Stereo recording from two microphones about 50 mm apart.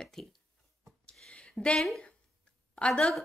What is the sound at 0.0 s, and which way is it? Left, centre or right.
Speech, centre.